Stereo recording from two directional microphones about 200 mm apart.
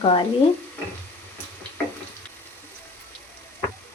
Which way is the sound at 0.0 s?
25° left (ahead or behind).